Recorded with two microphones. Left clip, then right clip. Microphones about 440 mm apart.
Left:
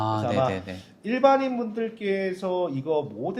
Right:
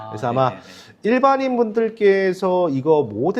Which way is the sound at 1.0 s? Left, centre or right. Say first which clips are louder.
Right 4 dB; right.